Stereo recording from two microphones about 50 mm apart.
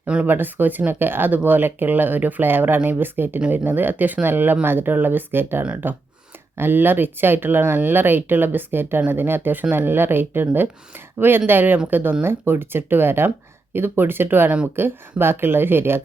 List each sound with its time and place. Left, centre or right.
0.3 s speech: right